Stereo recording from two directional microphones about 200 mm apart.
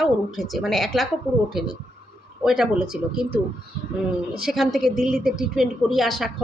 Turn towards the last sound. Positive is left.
turn(degrees=0)  # may be behind; listen again after turning